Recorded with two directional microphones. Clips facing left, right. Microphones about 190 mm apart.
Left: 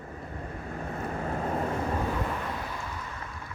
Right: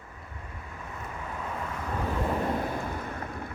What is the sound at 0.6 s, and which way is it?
Vehicle, 45° left (ahead or behind).